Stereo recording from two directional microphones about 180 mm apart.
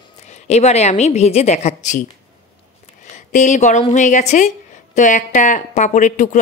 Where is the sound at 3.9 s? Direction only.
40° left (ahead or behind).